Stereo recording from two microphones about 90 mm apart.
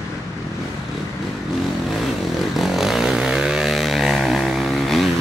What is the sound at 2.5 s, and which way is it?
Vehicle, centre (ahead or behind).